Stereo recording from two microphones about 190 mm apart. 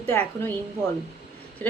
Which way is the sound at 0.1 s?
10° left (ahead or behind).